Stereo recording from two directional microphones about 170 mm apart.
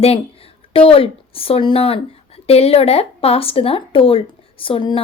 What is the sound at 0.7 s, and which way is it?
Speech, 35° left (ahead or behind).